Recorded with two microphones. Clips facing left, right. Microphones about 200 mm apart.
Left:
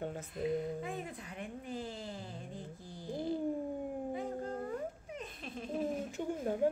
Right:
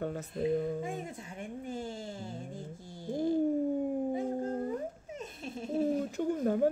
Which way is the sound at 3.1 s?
45° right (ahead or behind).